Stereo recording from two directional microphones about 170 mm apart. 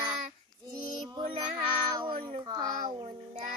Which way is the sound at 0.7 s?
25° right (ahead or behind).